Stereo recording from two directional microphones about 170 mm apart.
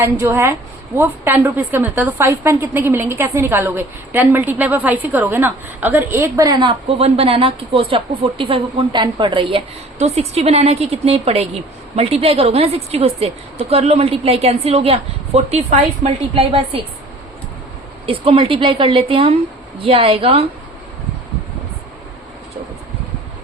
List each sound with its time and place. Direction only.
0.0 s a woman's voice: 15° right (ahead or behind); by 16.8 s 35° right (ahead or behind)
18.0 s a woman's voice: 30° right (ahead or behind)